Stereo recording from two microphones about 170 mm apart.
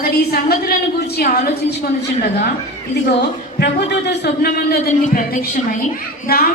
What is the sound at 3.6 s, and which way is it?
A man's voice, 75° left (ahead or behind).